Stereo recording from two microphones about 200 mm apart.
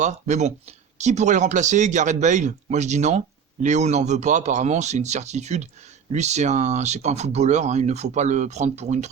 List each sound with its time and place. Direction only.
0.0 s speech: 35° right (ahead or behind)